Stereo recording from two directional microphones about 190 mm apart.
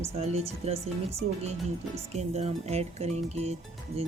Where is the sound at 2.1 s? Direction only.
35° right (ahead or behind).